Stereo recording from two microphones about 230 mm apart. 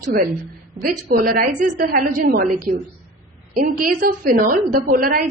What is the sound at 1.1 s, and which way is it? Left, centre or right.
A woman's voice, right.